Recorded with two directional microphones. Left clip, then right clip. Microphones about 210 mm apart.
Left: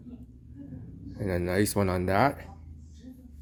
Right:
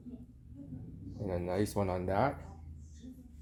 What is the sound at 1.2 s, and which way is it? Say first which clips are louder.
Speech: left 7 dB; 30° left (ahead or behind).